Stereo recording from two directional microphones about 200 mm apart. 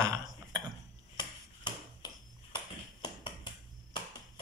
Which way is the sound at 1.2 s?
20° left (ahead or behind).